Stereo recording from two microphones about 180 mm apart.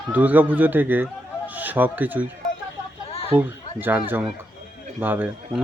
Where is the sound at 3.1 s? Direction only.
35° left (ahead or behind).